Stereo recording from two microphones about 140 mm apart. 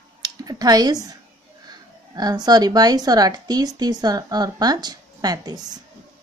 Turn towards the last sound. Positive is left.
turn(degrees=-30)  # may be behind; listen again after turning